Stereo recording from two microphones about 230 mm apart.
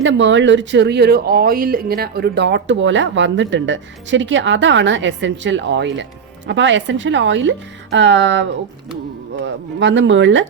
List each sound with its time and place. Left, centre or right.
0.0 s speech: right